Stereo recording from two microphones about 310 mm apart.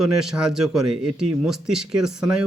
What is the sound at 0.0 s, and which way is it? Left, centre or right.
Speech, centre.